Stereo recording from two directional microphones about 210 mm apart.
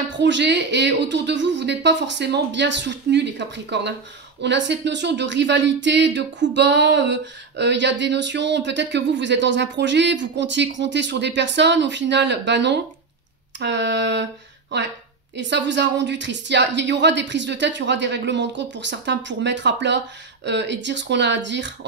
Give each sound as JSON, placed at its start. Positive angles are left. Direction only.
{"t": 0.2, "sound": "a woman's voice", "side_deg": -55}